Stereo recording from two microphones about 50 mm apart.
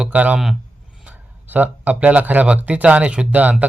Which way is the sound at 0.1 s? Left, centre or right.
Right.